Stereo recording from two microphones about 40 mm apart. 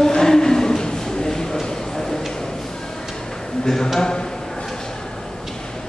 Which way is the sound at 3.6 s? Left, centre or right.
Centre.